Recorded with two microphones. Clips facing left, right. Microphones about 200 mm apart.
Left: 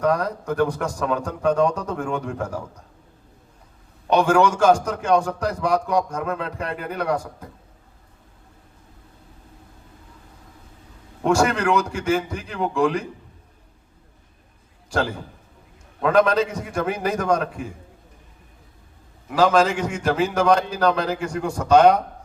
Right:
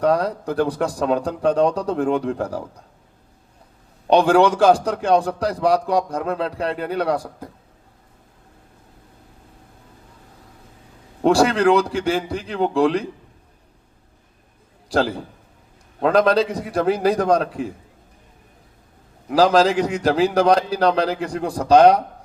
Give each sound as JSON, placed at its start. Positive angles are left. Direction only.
{"t": 0.0, "sound": "a man's voice", "side_deg": -35}
{"t": 4.0, "sound": "a man's voice", "side_deg": -35}
{"t": 11.2, "sound": "a man's voice", "side_deg": -35}
{"t": 14.8, "sound": "a man's voice", "side_deg": -35}
{"t": 19.3, "sound": "a man's voice", "side_deg": -35}